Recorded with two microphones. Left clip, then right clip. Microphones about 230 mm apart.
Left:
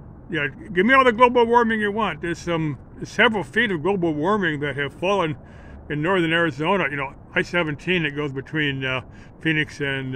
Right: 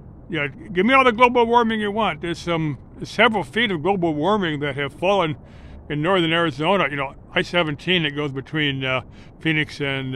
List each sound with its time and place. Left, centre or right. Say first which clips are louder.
0.3 s speech: even; right